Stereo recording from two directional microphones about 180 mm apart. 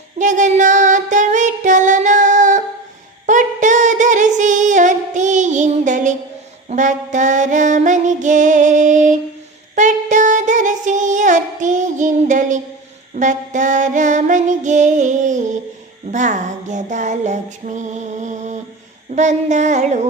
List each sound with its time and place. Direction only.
0.2 s music: 45° right (ahead or behind)
9.7 s singing: 45° right (ahead or behind)
13.1 s music: 45° right (ahead or behind)
19.1 s a sound: 40° right (ahead or behind)